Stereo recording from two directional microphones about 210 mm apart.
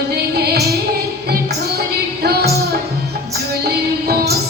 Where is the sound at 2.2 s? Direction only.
50° right (ahead or behind).